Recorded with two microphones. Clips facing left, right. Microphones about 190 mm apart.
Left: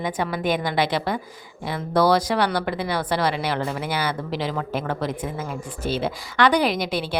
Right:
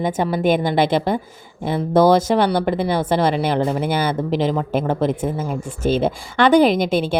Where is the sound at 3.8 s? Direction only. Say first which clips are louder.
Right 6 dB; 50° right (ahead or behind).